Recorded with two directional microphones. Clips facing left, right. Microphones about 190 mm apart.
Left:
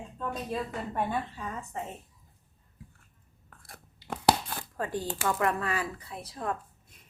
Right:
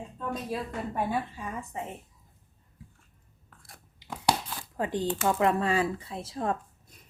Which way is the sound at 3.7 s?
55° left (ahead or behind).